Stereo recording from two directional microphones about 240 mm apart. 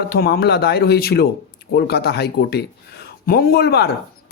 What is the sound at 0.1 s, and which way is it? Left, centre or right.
Speech, left.